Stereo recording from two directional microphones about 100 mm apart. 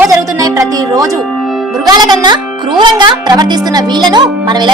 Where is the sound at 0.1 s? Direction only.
35° right (ahead or behind).